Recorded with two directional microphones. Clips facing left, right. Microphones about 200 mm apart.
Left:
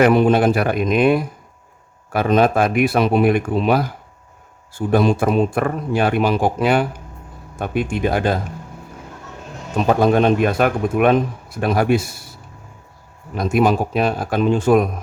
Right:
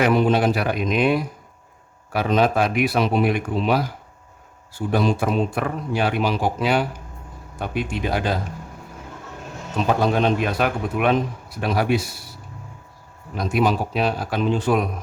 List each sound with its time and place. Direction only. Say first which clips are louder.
0.0 s a man's voice: left 4 dB; 55° left (ahead or behind)
9.7 s a man's voice: left 5 dB; 50° left (ahead or behind)
13.3 s a man's voice: left 4 dB; 50° left (ahead or behind)